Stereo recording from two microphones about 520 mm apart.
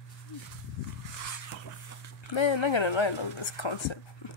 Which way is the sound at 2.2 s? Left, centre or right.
Left.